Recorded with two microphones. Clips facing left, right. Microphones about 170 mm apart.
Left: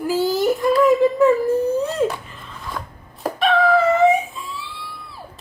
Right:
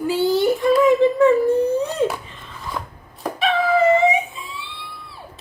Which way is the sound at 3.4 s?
Centre (ahead or behind).